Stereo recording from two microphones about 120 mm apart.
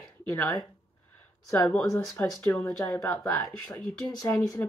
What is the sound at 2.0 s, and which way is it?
Speech, 5° left (ahead or behind).